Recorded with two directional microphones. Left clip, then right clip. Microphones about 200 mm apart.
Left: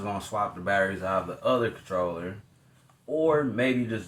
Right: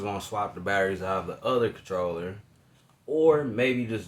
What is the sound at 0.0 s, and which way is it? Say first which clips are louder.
Speech: left 1 dB; 40° right (ahead or behind).